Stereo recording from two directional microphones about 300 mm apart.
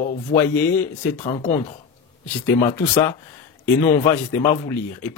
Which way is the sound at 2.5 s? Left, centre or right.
Centre.